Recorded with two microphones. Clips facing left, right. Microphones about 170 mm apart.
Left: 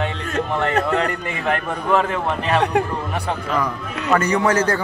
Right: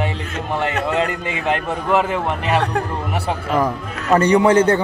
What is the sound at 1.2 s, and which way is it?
A man's voice, 20° right (ahead or behind).